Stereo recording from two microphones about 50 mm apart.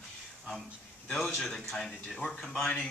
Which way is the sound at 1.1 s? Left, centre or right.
Centre.